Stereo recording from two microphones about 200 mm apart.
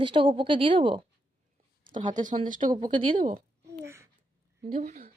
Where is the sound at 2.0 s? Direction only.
40° right (ahead or behind).